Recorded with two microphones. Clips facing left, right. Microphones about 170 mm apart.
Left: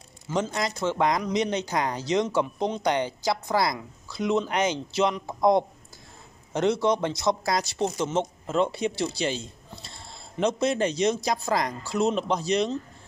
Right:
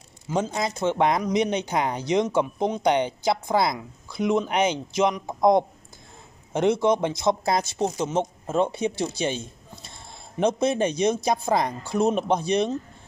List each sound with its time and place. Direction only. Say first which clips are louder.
0.3 s speech: right 2 dB; 15° right (ahead or behind)
10.7 s speech: right 2 dB; 20° right (ahead or behind)